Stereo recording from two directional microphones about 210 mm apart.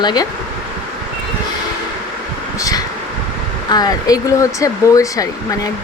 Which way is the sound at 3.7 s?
20° left (ahead or behind).